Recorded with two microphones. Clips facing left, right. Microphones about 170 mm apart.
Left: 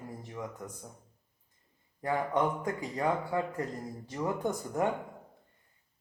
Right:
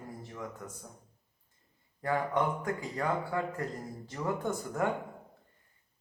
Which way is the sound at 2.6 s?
20° left (ahead or behind).